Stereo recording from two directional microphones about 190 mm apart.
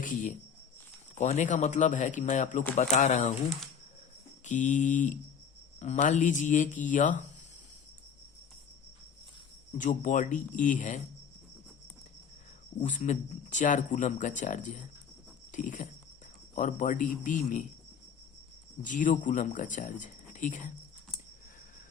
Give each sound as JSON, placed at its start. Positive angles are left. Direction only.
{"t": 0.0, "sound": "speech", "side_deg": 40}
{"t": 4.4, "sound": "speech", "side_deg": 40}
{"t": 9.7, "sound": "speech", "side_deg": 40}
{"t": 12.8, "sound": "speech", "side_deg": 40}
{"t": 18.8, "sound": "speech", "side_deg": 45}